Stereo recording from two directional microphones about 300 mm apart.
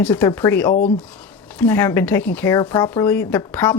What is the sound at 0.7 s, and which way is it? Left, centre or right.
Speech, left.